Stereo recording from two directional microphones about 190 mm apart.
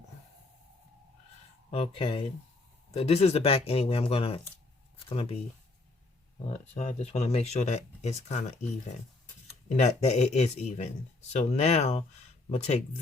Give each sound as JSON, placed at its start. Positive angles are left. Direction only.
{"t": 1.7, "sound": "speech", "side_deg": 30}
{"t": 6.5, "sound": "speech", "side_deg": 35}
{"t": 9.6, "sound": "speech", "side_deg": 35}